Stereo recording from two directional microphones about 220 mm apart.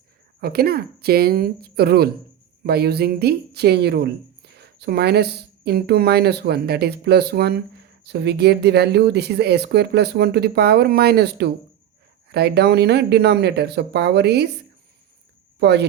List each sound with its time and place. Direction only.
0.4 s speech: 45° right (ahead or behind)
15.5 s speech: 50° right (ahead or behind)